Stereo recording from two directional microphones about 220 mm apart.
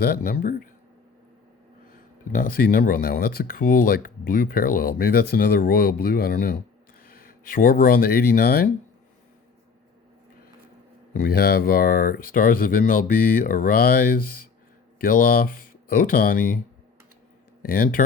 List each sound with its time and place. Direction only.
0.0 s speech: 40° left (ahead or behind)
2.3 s speech: 40° left (ahead or behind)
11.1 s speech: 45° left (ahead or behind)
17.6 s speech: 40° left (ahead or behind)